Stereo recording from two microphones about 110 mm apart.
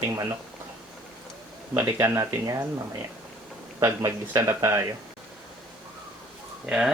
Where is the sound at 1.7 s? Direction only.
20° right (ahead or behind).